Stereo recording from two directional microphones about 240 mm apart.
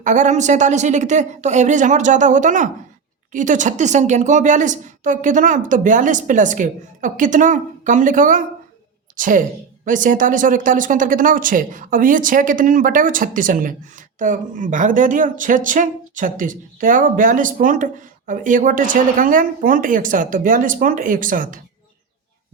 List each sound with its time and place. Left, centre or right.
0.0 s a woman's voice: right